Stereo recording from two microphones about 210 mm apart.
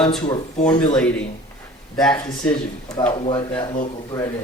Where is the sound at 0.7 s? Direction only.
20° left (ahead or behind).